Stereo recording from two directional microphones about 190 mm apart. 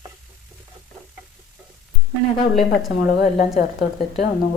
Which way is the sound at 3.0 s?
45° left (ahead or behind).